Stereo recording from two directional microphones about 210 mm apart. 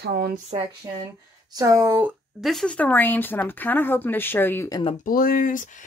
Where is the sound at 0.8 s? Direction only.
20° right (ahead or behind).